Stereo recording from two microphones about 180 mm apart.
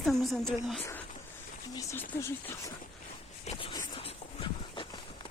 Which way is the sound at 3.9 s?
30° left (ahead or behind).